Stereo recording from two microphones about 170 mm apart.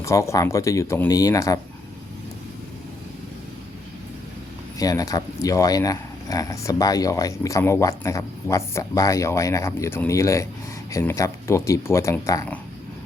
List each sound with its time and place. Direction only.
0.0 s speech: 15° left (ahead or behind)
4.8 s speech: 20° left (ahead or behind)